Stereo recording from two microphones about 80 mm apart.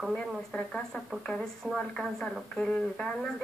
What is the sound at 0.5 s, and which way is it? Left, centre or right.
Speech, centre.